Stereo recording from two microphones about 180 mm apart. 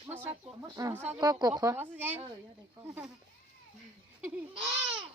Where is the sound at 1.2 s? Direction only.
20° right (ahead or behind).